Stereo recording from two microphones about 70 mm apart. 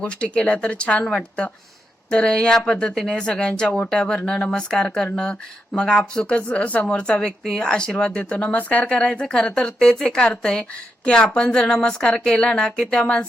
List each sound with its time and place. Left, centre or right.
0.0 s a woman's voice: centre